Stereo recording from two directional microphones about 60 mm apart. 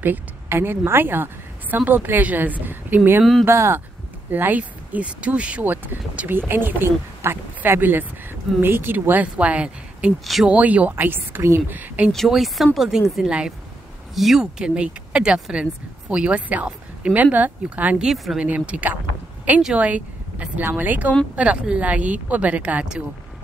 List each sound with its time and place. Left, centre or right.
0.0 s a woman's voice: right
3.4 s speech: right
4.3 s speech: right
11.7 s speech: right
12.1 s speech: centre
14.6 s speech: centre
18.0 s speech: centre
18.4 s speech: right